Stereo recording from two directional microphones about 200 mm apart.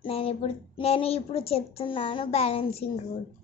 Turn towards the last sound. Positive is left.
turn(degrees=30)  # may be behind; listen again after turning